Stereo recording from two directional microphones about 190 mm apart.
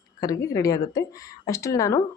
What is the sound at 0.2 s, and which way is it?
Speech, 20° left (ahead or behind).